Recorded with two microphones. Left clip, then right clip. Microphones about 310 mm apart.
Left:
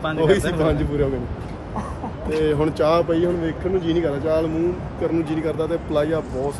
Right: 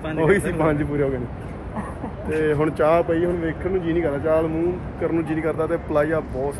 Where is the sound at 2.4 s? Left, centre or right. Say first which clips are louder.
Even; centre.